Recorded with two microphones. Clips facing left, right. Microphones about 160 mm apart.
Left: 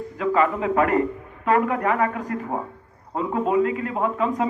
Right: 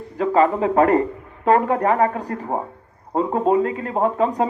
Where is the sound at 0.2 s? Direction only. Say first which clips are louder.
Right 4 dB; 35° right (ahead or behind).